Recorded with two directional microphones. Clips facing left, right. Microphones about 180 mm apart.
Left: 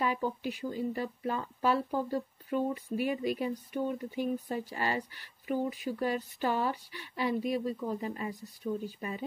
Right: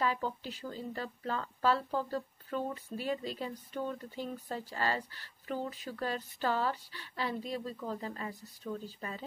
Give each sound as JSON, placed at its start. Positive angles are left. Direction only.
{"t": 0.0, "sound": "speech", "side_deg": 15}